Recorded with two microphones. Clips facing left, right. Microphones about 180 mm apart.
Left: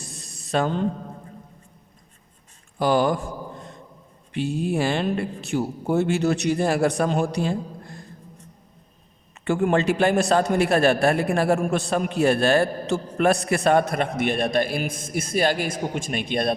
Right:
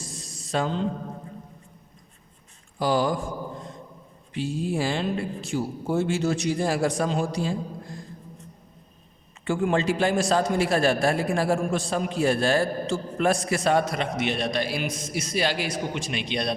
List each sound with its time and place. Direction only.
0.0 s a sound: 60° left (ahead or behind)
2.7 s speech: 60° left (ahead or behind)
4.3 s a man's voice: 65° left (ahead or behind)
9.4 s a man's voice: 60° left (ahead or behind)